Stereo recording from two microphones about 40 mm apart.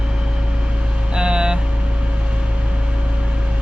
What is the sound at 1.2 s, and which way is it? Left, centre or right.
Speech, right.